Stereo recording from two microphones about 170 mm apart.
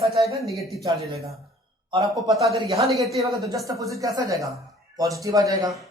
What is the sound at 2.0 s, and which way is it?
Speech, 20° right (ahead or behind).